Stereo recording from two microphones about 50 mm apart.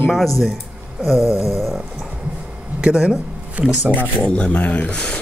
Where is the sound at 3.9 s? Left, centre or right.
Left.